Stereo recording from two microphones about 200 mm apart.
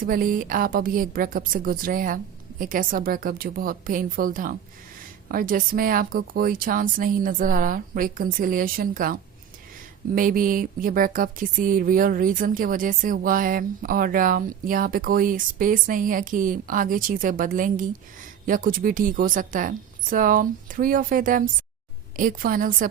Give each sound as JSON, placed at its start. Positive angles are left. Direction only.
{"t": 0.0, "sound": "speech", "side_deg": -45}
{"t": 10.2, "sound": "speech", "side_deg": -45}